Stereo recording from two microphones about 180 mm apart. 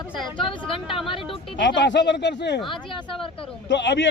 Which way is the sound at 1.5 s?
75° left (ahead or behind).